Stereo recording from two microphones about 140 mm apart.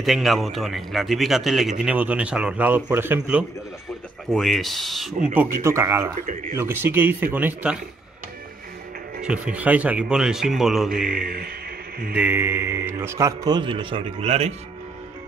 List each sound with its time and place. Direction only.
0.0 s a man's voice: centre (ahead or behind)
4.3 s a man's voice: centre (ahead or behind)
5.6 s speech: 20° right (ahead or behind)
9.2 s a man's voice: 5° right (ahead or behind)
11.1 s a man's voice: 90° right
12.2 s speech: 15° right (ahead or behind); by 14.0 s 35° right (ahead or behind)
14.2 s speech: 50° right (ahead or behind)